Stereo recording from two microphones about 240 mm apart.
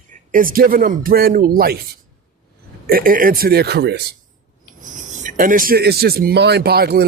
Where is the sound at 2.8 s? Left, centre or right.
Right.